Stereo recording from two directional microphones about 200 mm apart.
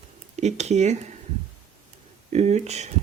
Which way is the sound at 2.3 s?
35° right (ahead or behind).